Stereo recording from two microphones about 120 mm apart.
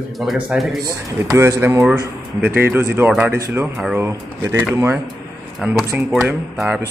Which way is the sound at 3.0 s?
10° right (ahead or behind).